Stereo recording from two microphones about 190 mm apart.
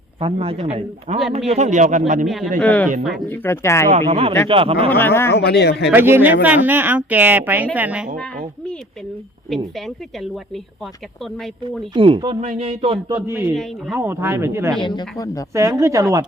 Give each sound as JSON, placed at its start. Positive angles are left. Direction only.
{"t": 0.2, "sound": "a man's voice", "side_deg": -30}
{"t": 2.2, "sound": "speech", "side_deg": 0}
{"t": 3.8, "sound": "a man's voice", "side_deg": -35}
{"t": 4.9, "sound": "speech", "side_deg": 10}
{"t": 5.3, "sound": "speech", "side_deg": 60}
{"t": 5.9, "sound": "a woman's voice", "side_deg": -10}
{"t": 9.7, "sound": "speech", "side_deg": 0}
{"t": 11.8, "sound": "a man's voice", "side_deg": -25}
{"t": 13.1, "sound": "a woman's voice", "side_deg": -10}
{"t": 14.8, "sound": "speech", "side_deg": 25}
{"t": 15.5, "sound": "a woman's voice", "side_deg": -15}